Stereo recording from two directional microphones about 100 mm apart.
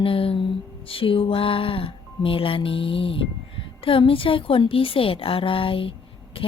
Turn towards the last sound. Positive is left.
turn(degrees=65)  # may be behind; listen again after turning